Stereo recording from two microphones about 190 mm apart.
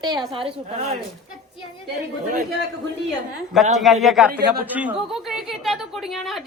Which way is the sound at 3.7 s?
Centre (ahead or behind).